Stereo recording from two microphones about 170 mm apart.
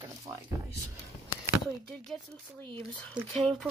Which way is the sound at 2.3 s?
30° right (ahead or behind).